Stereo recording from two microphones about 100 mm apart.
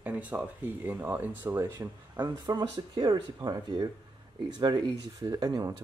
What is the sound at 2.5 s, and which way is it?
Speech, 45° right (ahead or behind).